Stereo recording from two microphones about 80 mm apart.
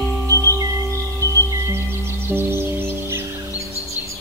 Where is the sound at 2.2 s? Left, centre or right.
Right.